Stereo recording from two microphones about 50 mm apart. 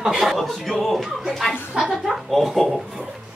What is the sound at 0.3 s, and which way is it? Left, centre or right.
Speech, centre.